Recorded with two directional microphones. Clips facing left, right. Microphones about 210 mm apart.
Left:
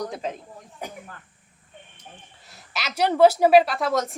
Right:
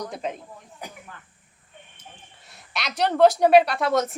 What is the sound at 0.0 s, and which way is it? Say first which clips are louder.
Speech: left 1 dB; centre (ahead or behind).